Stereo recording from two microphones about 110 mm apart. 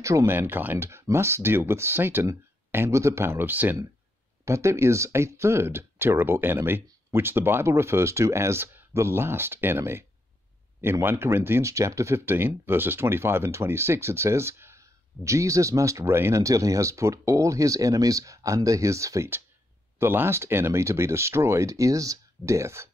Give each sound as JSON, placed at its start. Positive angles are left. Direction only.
{"t": 0.0, "sound": "speech", "side_deg": -30}